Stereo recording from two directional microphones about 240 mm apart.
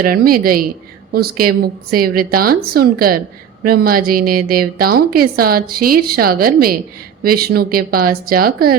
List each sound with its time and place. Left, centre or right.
0.0 s a woman's voice: right